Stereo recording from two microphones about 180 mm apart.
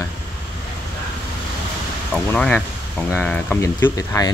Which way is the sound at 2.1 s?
5° left (ahead or behind).